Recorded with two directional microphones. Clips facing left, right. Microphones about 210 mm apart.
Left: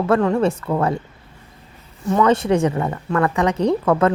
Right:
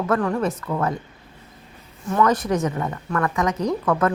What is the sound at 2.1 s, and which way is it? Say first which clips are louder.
A woman's voice: left 4 dB; 20° left (ahead or behind).